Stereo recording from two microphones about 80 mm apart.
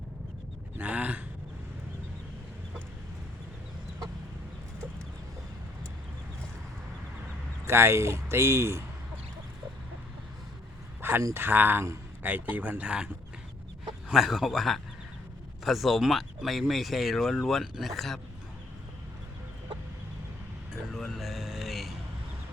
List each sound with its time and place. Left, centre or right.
0.8 s a sound: centre
7.6 s speech: right
11.0 s a sound: right
11.3 s speech: right
14.1 s speech: centre
20.9 s vehicle: centre